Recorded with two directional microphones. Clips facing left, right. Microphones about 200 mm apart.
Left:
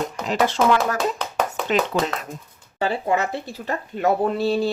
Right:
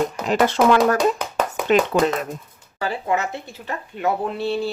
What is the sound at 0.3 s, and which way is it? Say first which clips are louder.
Speech: right 2 dB; 55° right (ahead or behind).